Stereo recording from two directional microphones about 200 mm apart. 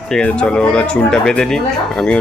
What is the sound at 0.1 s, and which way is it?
Speech, 5° left (ahead or behind).